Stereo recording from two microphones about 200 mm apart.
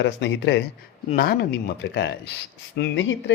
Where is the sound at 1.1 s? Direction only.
50° left (ahead or behind).